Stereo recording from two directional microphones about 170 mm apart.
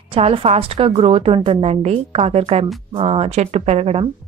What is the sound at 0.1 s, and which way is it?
A woman's voice, 35° right (ahead or behind).